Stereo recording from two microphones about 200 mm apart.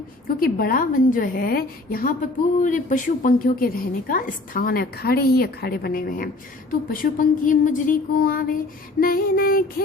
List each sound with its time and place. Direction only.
0.3 s a woman's voice: 50° left (ahead or behind)